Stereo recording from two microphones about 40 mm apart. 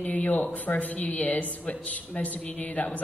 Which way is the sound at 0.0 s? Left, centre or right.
Left.